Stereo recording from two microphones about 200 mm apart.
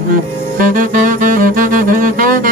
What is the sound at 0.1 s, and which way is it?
Saxophone, 40° right (ahead or behind).